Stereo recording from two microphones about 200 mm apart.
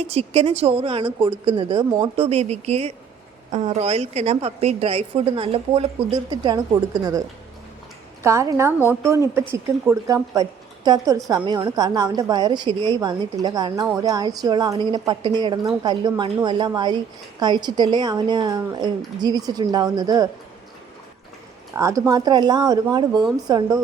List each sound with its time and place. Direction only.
0.0 s a woman's voice: 30° right (ahead or behind)
21.7 s a woman's voice: 15° right (ahead or behind)